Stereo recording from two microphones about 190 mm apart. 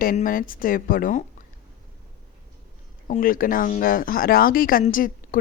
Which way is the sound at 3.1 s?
45° left (ahead or behind).